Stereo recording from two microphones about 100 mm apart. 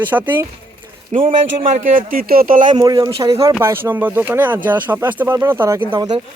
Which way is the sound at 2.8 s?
35° right (ahead or behind).